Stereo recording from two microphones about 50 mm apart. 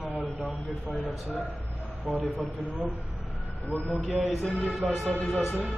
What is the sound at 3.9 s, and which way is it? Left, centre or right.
Speech, centre.